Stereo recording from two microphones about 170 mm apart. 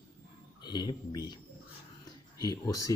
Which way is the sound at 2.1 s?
20° left (ahead or behind).